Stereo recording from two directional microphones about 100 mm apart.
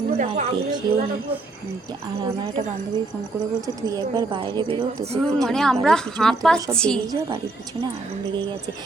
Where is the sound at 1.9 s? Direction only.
45° right (ahead or behind).